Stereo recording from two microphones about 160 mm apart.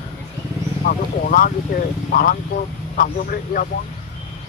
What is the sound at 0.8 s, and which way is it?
A man's voice, 60° left (ahead or behind).